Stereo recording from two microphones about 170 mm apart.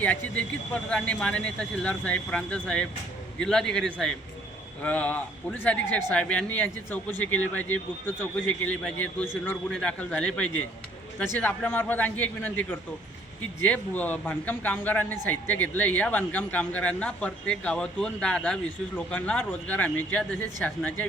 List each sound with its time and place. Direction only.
0.0 s a man's voice: 10° left (ahead or behind)